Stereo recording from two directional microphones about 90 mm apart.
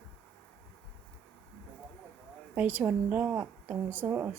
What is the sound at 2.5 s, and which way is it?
A woman's voice, 20° right (ahead or behind).